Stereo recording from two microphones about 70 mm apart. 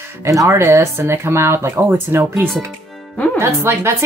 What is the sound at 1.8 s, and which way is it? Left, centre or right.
Speech, right.